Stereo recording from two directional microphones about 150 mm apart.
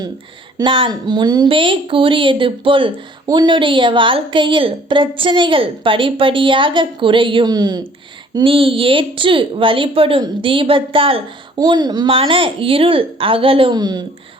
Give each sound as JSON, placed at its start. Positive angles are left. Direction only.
{"t": 0.6, "sound": "a woman's voice", "side_deg": -30}